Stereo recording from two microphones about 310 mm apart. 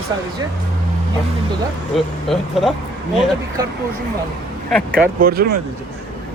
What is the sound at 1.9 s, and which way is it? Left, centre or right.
Speech, centre.